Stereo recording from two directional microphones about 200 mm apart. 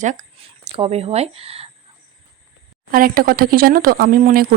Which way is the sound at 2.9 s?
45° right (ahead or behind).